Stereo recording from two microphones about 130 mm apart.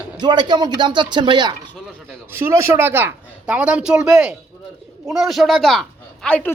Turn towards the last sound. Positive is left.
turn(degrees=10)  # may be behind; listen again after turning